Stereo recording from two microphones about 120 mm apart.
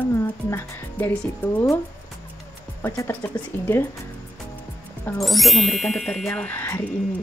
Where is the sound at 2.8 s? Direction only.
20° left (ahead or behind).